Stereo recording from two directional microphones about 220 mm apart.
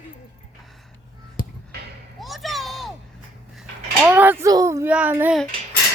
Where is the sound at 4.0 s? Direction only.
10° right (ahead or behind).